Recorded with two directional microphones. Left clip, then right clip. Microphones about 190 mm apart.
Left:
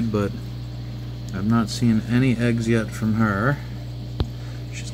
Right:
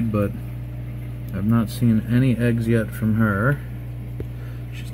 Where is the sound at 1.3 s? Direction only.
15° right (ahead or behind).